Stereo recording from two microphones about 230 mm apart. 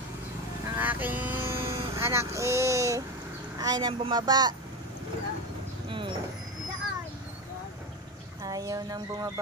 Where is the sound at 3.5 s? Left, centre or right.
Centre.